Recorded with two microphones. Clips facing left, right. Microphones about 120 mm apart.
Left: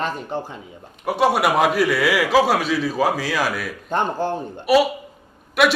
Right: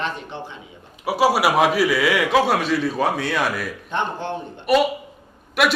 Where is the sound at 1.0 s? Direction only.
5° right (ahead or behind).